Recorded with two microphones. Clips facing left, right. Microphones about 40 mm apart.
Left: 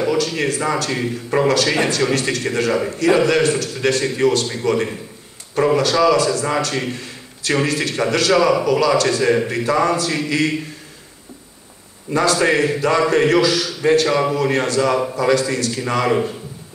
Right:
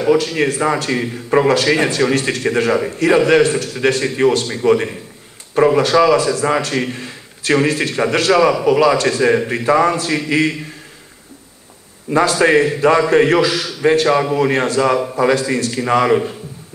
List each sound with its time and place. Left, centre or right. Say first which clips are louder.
0.0 s a man's voice: right 4 dB; right
12.1 s a man's voice: right 3 dB; right